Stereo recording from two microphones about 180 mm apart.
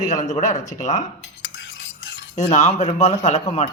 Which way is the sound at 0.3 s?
40° left (ahead or behind).